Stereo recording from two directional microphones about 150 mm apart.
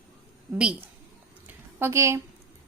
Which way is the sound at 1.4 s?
15° right (ahead or behind).